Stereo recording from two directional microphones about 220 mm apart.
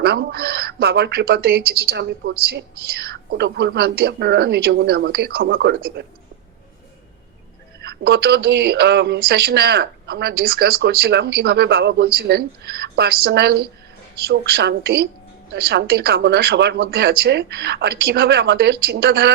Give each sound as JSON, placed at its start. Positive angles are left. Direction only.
{"t": 0.0, "sound": "speech", "side_deg": -45}
{"t": 7.8, "sound": "speech", "side_deg": -45}